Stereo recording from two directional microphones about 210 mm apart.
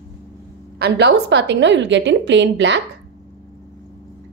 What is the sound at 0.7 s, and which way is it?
A woman's voice, 50° right (ahead or behind).